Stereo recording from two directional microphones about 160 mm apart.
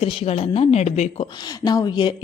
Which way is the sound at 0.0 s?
35° left (ahead or behind).